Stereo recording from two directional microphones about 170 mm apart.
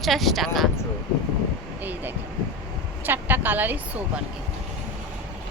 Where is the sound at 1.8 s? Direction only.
10° right (ahead or behind).